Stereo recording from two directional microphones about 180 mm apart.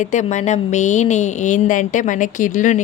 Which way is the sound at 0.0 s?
40° left (ahead or behind).